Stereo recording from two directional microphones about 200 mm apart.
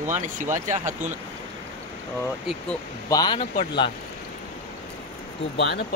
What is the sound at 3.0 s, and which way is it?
Speech, 20° left (ahead or behind).